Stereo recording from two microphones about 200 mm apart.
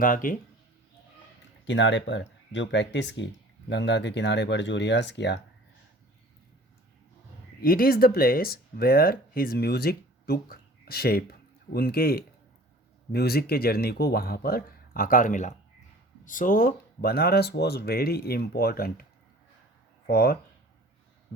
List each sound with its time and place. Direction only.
0.0 s speech: 45° left (ahead or behind)
1.6 s speech: 65° left (ahead or behind)
7.6 s speech: 45° left (ahead or behind)
20.1 s speech: 50° left (ahead or behind)